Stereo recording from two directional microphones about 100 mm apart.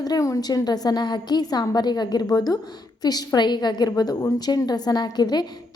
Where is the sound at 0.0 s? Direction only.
35° left (ahead or behind).